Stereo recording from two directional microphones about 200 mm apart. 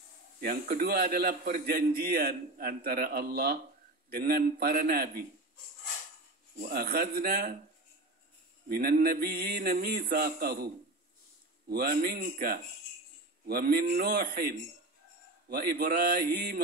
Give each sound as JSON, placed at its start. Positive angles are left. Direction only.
{"t": 0.4, "sound": "a man's voice", "side_deg": -45}
{"t": 6.7, "sound": "a man's voice", "side_deg": -50}
{"t": 8.6, "sound": "a man's voice", "side_deg": -50}
{"t": 11.7, "sound": "a man's voice", "side_deg": -50}